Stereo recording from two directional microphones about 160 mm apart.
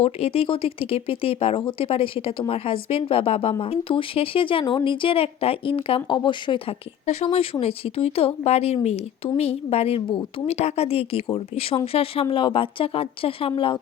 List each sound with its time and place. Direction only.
0.0 s speech: 40° left (ahead or behind)
7.0 s speech: 40° left (ahead or behind)